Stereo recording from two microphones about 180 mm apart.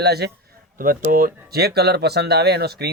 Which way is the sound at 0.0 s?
65° right (ahead or behind).